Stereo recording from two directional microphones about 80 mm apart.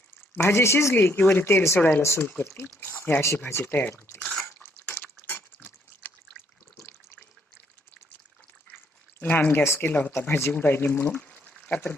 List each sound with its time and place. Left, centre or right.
0.3 s speech: left
2.8 s a sound: left
3.6 s speech: left
4.4 s a sound: centre
5.6 s water: left
9.2 s speech: left